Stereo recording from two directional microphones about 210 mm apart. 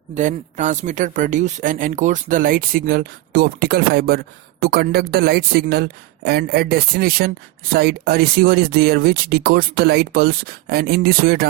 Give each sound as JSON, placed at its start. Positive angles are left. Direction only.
{"t": 0.1, "sound": "a woman's voice", "side_deg": -35}